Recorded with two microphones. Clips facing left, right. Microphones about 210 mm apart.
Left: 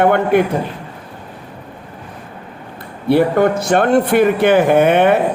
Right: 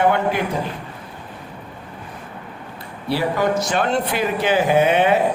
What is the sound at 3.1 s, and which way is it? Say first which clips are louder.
A man's voice: left 7 dB; 55° left (ahead or behind).